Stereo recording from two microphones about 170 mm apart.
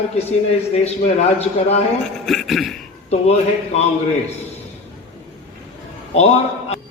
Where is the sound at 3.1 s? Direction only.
40° left (ahead or behind).